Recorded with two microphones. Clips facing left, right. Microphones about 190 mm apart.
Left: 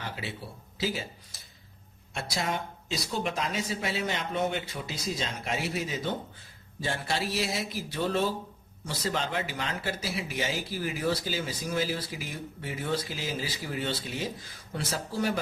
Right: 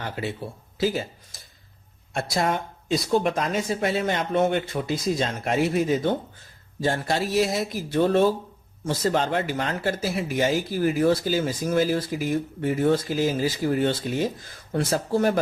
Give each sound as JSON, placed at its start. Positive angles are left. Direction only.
{"t": 0.0, "sound": "speech", "side_deg": -50}